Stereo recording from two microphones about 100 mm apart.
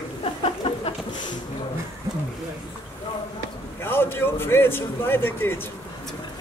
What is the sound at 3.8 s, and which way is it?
A man's voice, 25° left (ahead or behind).